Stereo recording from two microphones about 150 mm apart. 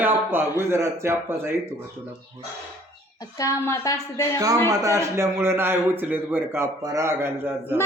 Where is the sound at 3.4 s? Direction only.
20° left (ahead or behind).